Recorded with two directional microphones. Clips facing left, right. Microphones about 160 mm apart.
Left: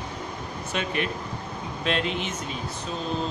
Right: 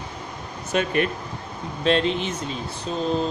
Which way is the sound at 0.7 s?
45° right (ahead or behind).